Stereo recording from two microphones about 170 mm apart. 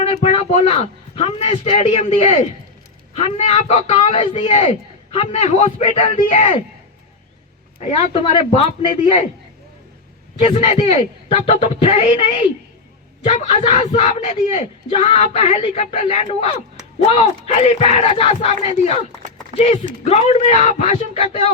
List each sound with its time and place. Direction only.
0.0 s a man's voice: 35° left (ahead or behind)
7.8 s speech: 40° left (ahead or behind)
10.3 s a man's voice: 30° left (ahead or behind)
10.6 s speech: 40° left (ahead or behind)